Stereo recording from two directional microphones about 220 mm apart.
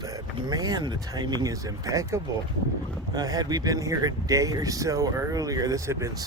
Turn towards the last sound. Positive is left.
turn(degrees=-15)  # may be behind; listen again after turning